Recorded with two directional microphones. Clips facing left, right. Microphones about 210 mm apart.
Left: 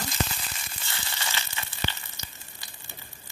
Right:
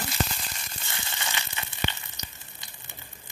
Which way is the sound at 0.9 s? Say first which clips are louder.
Even; 20° right (ahead or behind).